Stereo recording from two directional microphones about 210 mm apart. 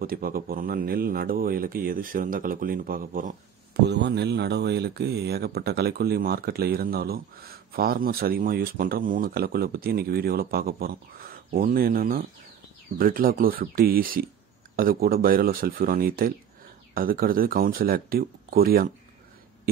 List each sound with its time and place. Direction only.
0.0 s speech: 45° right (ahead or behind)
3.8 s speech: 55° right (ahead or behind)